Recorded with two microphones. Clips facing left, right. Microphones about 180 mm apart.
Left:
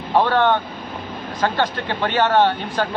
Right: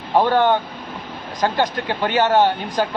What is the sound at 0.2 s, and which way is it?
A man's voice, 15° right (ahead or behind).